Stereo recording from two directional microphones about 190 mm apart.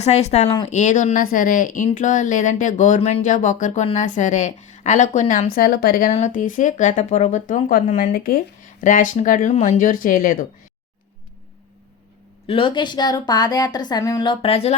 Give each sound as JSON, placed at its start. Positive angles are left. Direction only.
{"t": 0.0, "sound": "a woman's voice", "side_deg": 35}
{"t": 6.1, "sound": "a woman's voice", "side_deg": 40}
{"t": 8.1, "sound": "speech", "side_deg": 50}
{"t": 12.5, "sound": "a woman's voice", "side_deg": 25}